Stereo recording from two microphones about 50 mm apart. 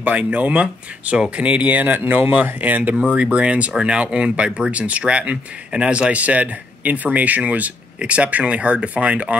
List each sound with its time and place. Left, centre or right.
0.0 s speech: right